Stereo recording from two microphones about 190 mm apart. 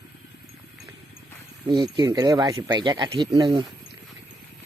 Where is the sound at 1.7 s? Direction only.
25° right (ahead or behind).